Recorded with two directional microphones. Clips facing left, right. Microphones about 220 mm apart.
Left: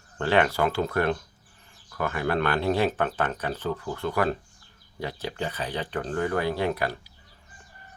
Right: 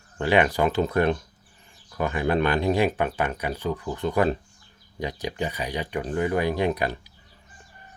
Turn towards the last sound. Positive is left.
turn(degrees=-20)  # may be behind; listen again after turning